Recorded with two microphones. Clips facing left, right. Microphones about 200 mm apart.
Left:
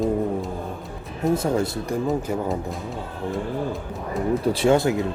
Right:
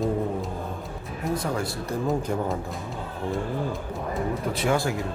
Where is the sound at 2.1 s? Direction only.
Centre (ahead or behind).